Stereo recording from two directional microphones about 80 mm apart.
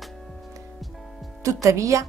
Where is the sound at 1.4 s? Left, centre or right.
Right.